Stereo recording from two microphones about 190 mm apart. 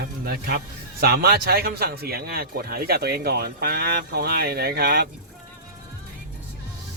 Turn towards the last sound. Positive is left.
turn(degrees=-55)  # may be behind; listen again after turning